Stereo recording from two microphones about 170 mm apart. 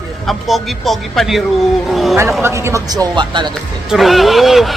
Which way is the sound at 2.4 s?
15° right (ahead or behind).